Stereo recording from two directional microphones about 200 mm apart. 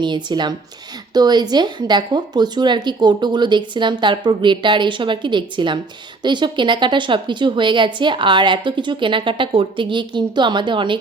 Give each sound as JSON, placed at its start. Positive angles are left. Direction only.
{"t": 0.0, "sound": "speech", "side_deg": -20}